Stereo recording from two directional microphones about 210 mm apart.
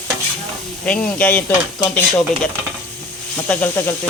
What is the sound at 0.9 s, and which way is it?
Speech, 5° left (ahead or behind).